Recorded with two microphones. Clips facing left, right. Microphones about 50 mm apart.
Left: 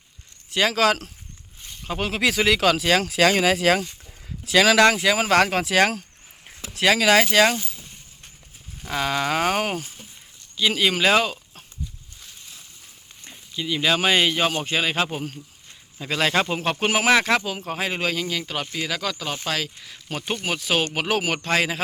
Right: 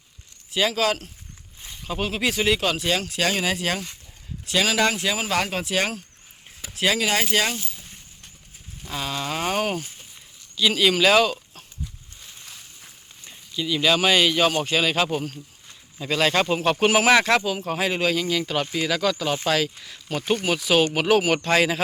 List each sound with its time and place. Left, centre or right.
0.5 s speech: left
1.9 s speech: left
8.9 s speech: left
9.5 s speech: left
10.6 s speech: left
13.6 s speech: left
17.1 s speech: centre
17.7 s speech: centre